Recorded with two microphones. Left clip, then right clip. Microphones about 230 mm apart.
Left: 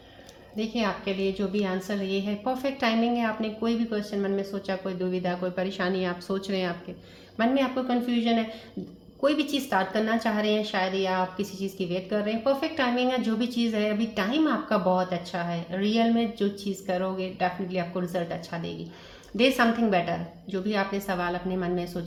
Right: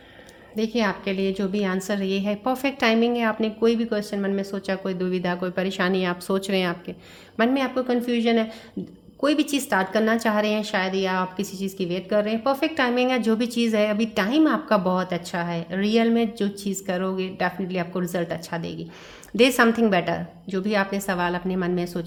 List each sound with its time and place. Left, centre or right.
0.5 s a woman's voice: right